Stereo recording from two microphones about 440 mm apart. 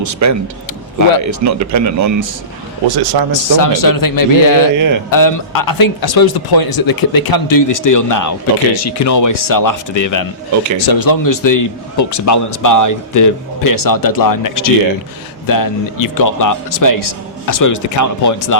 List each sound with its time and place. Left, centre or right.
0.0 s a man's voice: right
3.5 s a man's voice: left
4.8 s speech: right
5.1 s a man's voice: left